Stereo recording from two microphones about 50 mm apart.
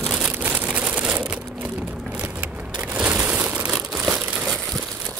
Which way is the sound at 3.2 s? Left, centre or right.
Right.